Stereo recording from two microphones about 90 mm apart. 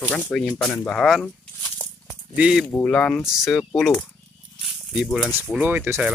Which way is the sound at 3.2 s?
5° right (ahead or behind).